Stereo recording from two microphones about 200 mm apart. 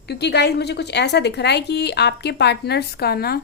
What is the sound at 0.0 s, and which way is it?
A woman's voice, 55° left (ahead or behind).